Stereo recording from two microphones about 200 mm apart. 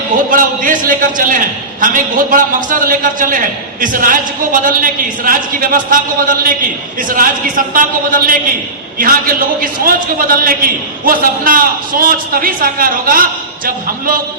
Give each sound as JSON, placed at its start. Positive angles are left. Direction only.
{"t": 0.3, "sound": "a man's voice", "side_deg": -40}